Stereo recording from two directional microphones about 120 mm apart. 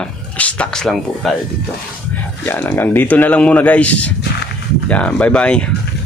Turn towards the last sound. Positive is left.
turn(degrees=10)  # may be behind; listen again after turning